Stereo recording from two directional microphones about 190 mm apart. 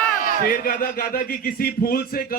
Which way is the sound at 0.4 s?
50° left (ahead or behind).